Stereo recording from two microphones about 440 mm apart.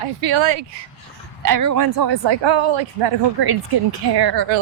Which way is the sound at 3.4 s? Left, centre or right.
Right.